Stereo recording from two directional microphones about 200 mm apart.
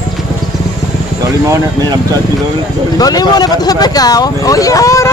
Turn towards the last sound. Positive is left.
turn(degrees=15)  # may be behind; listen again after turning